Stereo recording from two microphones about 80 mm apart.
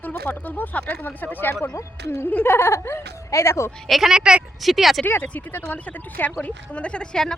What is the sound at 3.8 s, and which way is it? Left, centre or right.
Speech, centre.